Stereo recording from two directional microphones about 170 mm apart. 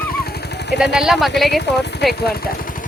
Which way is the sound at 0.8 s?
Centre (ahead or behind).